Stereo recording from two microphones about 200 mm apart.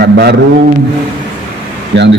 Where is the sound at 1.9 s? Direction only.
65° right (ahead or behind).